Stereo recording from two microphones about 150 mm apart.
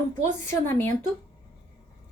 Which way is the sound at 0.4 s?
15° left (ahead or behind).